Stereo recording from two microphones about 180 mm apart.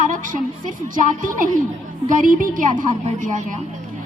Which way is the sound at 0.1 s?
45° right (ahead or behind).